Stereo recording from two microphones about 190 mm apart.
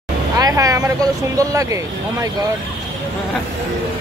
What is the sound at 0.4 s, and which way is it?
Vehicle, 15° right (ahead or behind).